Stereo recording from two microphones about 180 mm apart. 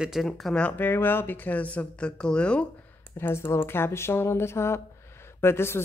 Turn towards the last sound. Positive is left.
turn(degrees=15)  # may be behind; listen again after turning